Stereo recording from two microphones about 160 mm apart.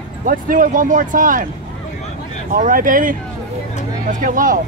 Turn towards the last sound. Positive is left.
turn(degrees=-55)  # may be behind; listen again after turning